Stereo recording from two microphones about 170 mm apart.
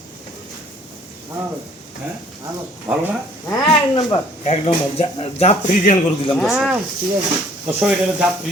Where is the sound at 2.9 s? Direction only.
15° right (ahead or behind).